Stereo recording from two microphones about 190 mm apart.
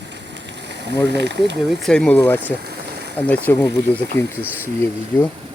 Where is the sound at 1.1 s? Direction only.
65° right (ahead or behind).